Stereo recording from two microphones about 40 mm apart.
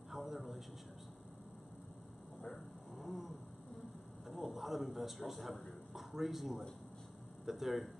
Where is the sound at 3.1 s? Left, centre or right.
Centre.